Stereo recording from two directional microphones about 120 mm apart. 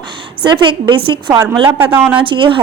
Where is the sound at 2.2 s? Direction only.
45° right (ahead or behind).